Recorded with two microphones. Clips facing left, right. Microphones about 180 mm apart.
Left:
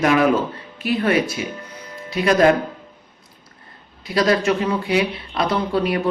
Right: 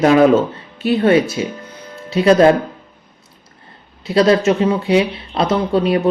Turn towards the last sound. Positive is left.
turn(degrees=-25)  # may be behind; listen again after turning